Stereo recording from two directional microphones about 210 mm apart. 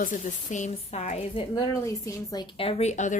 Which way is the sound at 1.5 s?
15° left (ahead or behind).